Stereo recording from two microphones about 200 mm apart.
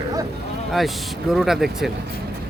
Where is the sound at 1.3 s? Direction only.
Centre (ahead or behind).